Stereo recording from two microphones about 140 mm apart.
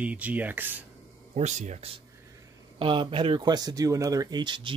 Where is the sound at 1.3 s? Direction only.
50° right (ahead or behind).